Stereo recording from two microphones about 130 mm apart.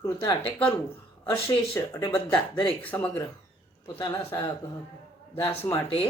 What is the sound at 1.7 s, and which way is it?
Speech, 20° left (ahead or behind).